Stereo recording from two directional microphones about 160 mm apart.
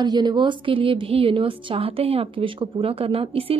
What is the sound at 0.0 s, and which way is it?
A woman's voice, 25° right (ahead or behind).